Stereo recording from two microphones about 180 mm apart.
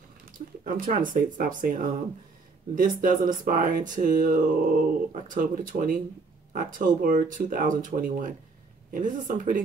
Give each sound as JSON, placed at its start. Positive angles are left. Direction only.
{"t": 0.7, "sound": "speech", "side_deg": -50}